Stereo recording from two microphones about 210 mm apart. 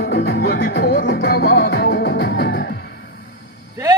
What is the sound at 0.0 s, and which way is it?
Music, 50° left (ahead or behind).